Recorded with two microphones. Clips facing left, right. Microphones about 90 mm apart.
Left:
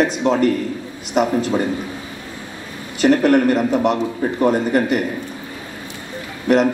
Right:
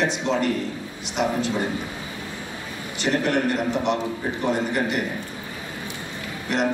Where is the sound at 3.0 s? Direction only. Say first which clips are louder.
Left 9 dB; 45° left (ahead or behind).